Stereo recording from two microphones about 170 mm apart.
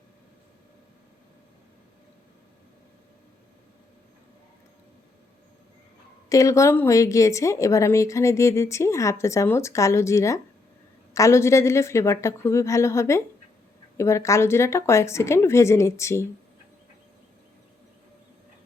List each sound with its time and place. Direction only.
6.2 s a woman's voice: 20° left (ahead or behind)